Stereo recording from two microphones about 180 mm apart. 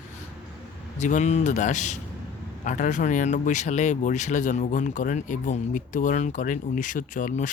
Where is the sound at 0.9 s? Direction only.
40° left (ahead or behind).